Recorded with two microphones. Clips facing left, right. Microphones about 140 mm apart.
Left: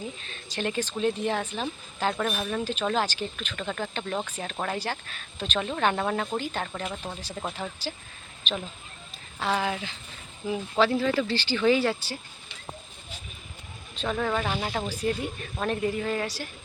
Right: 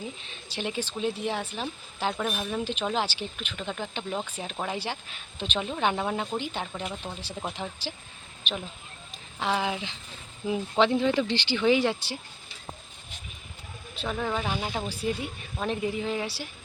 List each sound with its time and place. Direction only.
0.5 s speech: 10° right (ahead or behind)
7.0 s speech: 10° left (ahead or behind)
7.3 s speech: 10° right (ahead or behind)
14.0 s speech: 10° right (ahead or behind)